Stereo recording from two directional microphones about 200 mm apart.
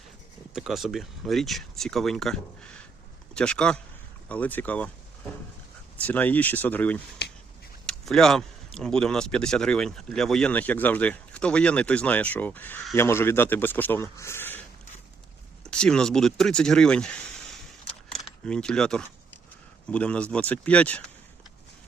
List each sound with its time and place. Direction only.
0.5 s speech: centre (ahead or behind)
6.0 s speech: 10° left (ahead or behind)
7.2 s finger snapping: 50° left (ahead or behind)
7.9 s speech: centre (ahead or behind)
15.6 s speech: 5° left (ahead or behind)
17.8 s keys jangling: centre (ahead or behind)
19.9 s speech: 5° left (ahead or behind)